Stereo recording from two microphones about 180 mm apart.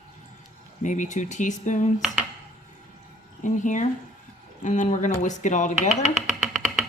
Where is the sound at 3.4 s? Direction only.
45° left (ahead or behind).